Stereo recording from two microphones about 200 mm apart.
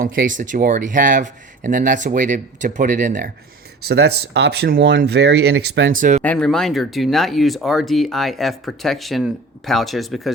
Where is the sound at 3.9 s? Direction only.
55° right (ahead or behind).